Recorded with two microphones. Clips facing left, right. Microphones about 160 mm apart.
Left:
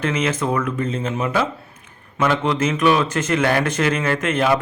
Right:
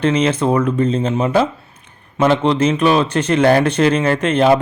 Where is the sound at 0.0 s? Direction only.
30° right (ahead or behind).